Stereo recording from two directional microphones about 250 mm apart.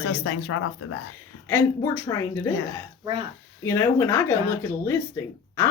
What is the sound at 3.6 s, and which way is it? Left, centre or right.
Speech, centre.